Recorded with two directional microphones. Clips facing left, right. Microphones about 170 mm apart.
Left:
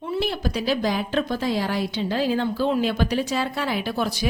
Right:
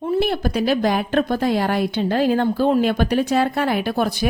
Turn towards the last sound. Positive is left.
turn(degrees=-55)  # may be behind; listen again after turning